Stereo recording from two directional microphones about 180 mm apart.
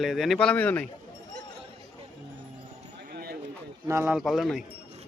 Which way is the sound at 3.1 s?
60° right (ahead or behind).